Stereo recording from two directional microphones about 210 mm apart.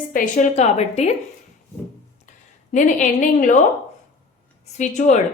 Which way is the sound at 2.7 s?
35° left (ahead or behind).